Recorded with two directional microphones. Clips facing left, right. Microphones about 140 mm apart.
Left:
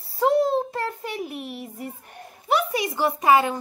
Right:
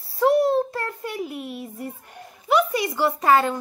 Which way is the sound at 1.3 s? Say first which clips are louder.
Right 1 dB; 65° left (ahead or behind).